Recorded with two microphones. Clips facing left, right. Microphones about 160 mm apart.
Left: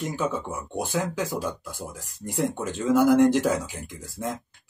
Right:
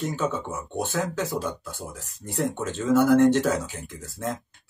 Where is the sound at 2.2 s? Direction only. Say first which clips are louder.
Even; 10° left (ahead or behind).